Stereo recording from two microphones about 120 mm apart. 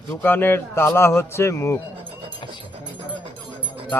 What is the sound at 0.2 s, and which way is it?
Speech, 15° left (ahead or behind).